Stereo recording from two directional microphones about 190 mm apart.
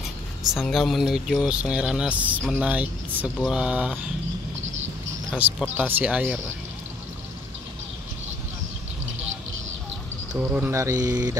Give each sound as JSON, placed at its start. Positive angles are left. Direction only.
{"t": 0.6, "sound": "speech", "side_deg": 0}
{"t": 5.3, "sound": "speech", "side_deg": -5}
{"t": 10.3, "sound": "speech", "side_deg": -5}